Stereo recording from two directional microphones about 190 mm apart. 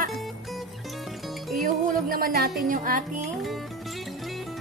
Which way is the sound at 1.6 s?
45° right (ahead or behind).